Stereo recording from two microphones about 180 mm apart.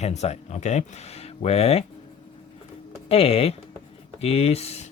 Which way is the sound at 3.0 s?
35° left (ahead or behind).